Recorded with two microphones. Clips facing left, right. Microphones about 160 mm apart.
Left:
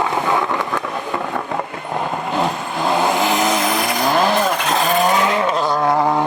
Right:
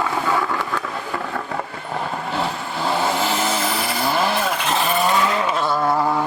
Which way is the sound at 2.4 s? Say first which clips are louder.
Left 5 dB; 20° left (ahead or behind).